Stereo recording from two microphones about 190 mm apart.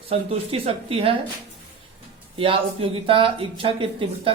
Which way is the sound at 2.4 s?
30° right (ahead or behind).